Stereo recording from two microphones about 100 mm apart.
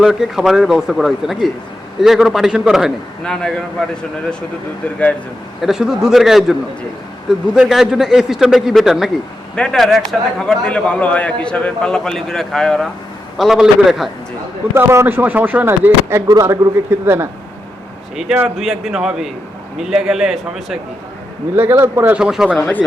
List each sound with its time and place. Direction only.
0.0 s a man's voice: 5° right (ahead or behind)
3.2 s a man's voice: 5° left (ahead or behind)
5.6 s a man's voice: 5° right (ahead or behind)
14.8 s speech: 25° right (ahead or behind)
16.2 s speech: 35° right (ahead or behind)
16.9 s speech: 25° right (ahead or behind)
18.4 s a man's voice: centre (ahead or behind)
21.5 s speech: 20° right (ahead or behind)
22.1 s speech: 5° right (ahead or behind)
22.5 s a man's voice: 15° left (ahead or behind)